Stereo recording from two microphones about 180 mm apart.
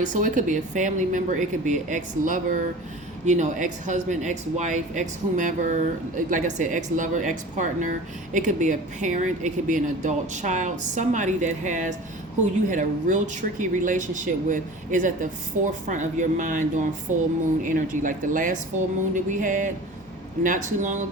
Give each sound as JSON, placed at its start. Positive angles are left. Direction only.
{"t": 0.0, "sound": "speech", "side_deg": -45}
{"t": 17.7, "sound": "speech", "side_deg": -45}